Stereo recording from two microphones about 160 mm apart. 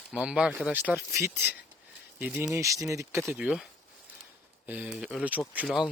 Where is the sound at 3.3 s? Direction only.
5° right (ahead or behind).